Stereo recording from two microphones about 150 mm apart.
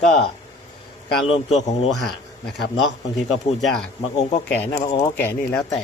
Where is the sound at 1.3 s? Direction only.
45° left (ahead or behind).